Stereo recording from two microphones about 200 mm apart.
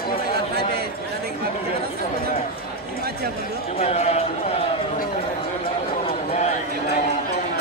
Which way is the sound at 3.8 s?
30° left (ahead or behind).